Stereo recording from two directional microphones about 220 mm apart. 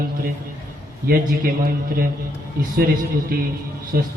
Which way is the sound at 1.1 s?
40° right (ahead or behind).